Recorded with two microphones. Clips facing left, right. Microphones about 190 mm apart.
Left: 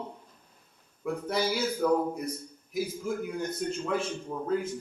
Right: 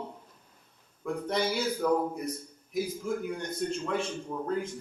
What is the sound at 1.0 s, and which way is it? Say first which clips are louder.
A man's voice: even; 5° left (ahead or behind).